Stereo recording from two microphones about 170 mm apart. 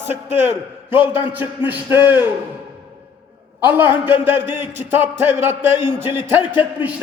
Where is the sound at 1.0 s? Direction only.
30° left (ahead or behind).